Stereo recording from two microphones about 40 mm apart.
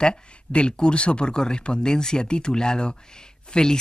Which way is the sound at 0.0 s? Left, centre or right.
Left.